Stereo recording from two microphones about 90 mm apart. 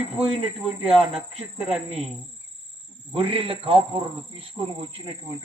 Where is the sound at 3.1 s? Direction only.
90° right.